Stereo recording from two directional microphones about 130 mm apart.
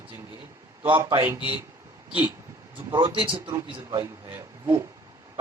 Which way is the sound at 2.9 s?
35° right (ahead or behind).